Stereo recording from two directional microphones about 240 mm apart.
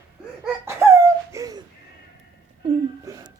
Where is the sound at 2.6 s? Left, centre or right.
Centre.